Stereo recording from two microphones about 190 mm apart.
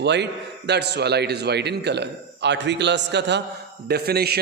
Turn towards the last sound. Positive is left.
turn(degrees=-55)  # may be behind; listen again after turning